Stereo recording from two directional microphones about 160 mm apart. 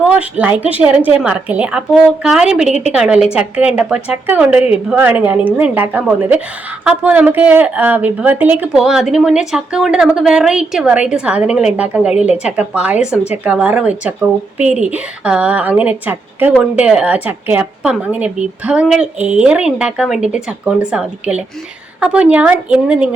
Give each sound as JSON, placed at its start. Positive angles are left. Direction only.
{"t": 0.0, "sound": "a woman's voice", "side_deg": -10}